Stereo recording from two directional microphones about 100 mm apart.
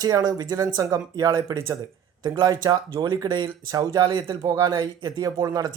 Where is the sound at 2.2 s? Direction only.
45° right (ahead or behind).